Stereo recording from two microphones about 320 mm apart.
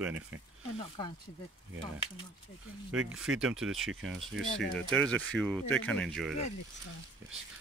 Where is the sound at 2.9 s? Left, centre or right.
Centre.